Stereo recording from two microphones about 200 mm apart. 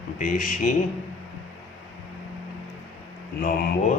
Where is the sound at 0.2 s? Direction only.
40° left (ahead or behind).